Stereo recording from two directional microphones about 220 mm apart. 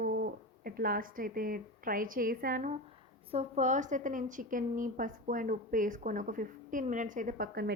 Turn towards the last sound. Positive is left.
turn(degrees=-45)  # may be behind; listen again after turning